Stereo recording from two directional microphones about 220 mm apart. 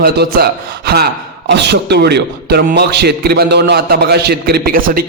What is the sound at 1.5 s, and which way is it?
A man's voice, 50° right (ahead or behind).